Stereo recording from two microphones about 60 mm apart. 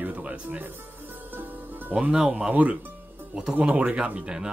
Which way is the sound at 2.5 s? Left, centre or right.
Right.